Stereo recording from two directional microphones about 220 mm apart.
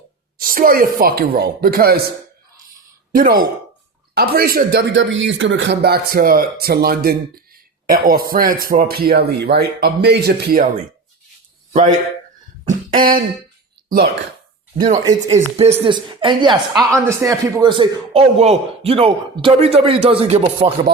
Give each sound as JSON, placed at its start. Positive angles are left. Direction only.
{"t": 0.3, "sound": "speech", "side_deg": -40}
{"t": 3.1, "sound": "speech", "side_deg": -40}
{"t": 11.7, "sound": "speech", "side_deg": -35}
{"t": 12.6, "sound": "cough", "side_deg": -40}
{"t": 15.5, "sound": "a woman's voice", "side_deg": -25}